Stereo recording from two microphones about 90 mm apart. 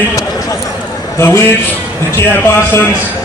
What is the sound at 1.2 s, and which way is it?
Speech, 25° left (ahead or behind).